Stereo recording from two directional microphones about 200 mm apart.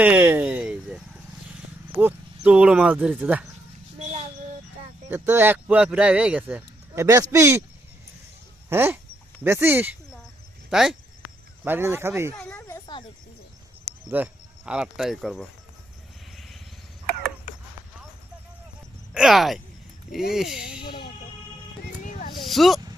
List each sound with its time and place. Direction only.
0.0 s a sound: 10° right (ahead or behind)
5.0 s speech: 10° right (ahead or behind)
8.7 s speech: 10° right (ahead or behind)
12.4 s a sound: 10° left (ahead or behind)
14.1 s speech: 5° right (ahead or behind)
19.1 s speech: centre (ahead or behind)
20.8 s speech: 55° left (ahead or behind)
22.4 s speech: centre (ahead or behind)